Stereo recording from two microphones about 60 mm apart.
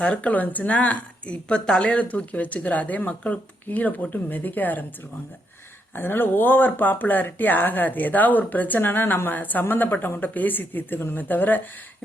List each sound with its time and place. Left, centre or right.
0.0 s a woman's voice: left
5.9 s speech: left